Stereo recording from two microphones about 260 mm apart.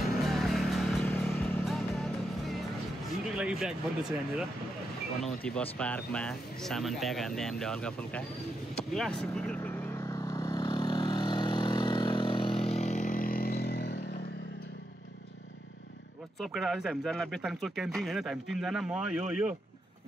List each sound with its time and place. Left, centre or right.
0.0 s vehicle: centre
3.3 s speech: centre
5.2 s speech: centre
8.9 s vehicle: centre; by 14.0 s left
16.3 s speech: centre